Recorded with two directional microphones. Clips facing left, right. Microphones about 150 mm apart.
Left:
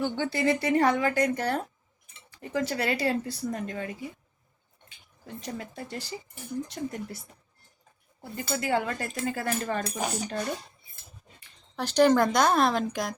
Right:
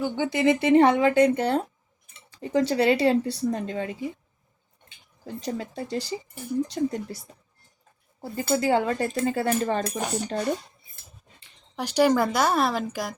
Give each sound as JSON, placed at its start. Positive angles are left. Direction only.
{"t": 0.0, "sound": "speech", "side_deg": -15}
{"t": 5.2, "sound": "speech", "side_deg": -30}
{"t": 8.2, "sound": "speech", "side_deg": -30}
{"t": 10.0, "sound": "speech", "side_deg": 0}
{"t": 11.8, "sound": "speech", "side_deg": -10}